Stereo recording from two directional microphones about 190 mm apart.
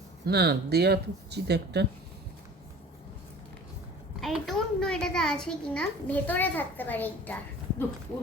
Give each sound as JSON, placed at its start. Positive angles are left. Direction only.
{"t": 0.3, "sound": "speech", "side_deg": -60}
{"t": 4.2, "sound": "a child's voice", "side_deg": 0}